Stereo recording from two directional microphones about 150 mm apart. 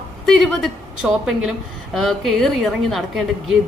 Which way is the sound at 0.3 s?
Centre (ahead or behind).